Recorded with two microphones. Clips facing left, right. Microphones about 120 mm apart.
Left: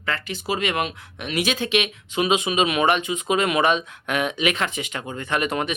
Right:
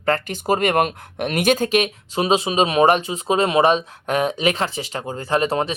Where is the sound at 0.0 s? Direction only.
45° right (ahead or behind).